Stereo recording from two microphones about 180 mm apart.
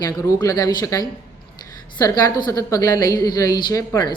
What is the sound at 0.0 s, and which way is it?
A woman's voice, 20° left (ahead or behind).